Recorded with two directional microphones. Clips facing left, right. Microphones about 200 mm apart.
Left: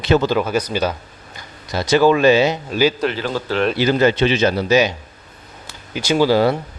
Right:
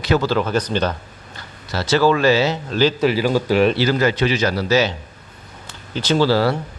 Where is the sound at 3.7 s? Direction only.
20° left (ahead or behind).